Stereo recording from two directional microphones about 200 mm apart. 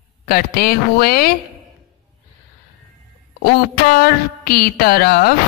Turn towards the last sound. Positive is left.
turn(degrees=50)  # may be behind; listen again after turning